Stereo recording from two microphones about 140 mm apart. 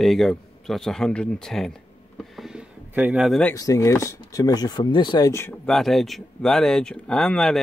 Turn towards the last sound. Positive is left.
turn(degrees=5)  # may be behind; listen again after turning